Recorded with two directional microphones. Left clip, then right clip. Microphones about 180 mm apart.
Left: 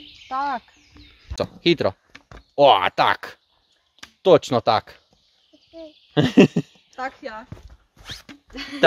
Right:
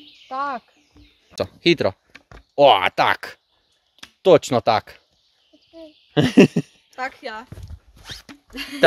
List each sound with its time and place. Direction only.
0.3 s speech: 20° right (ahead or behind)
1.0 s a sound: 5° left (ahead or behind)
1.3 s speech: 15° right (ahead or behind)
2.1 s a sound: centre (ahead or behind)
2.5 s speech: 15° right (ahead or behind)
6.1 s a sound: 15° right (ahead or behind)
7.0 s speech: 45° right (ahead or behind)
7.9 s zipper: 5° right (ahead or behind)
8.5 s speech: 60° right (ahead or behind)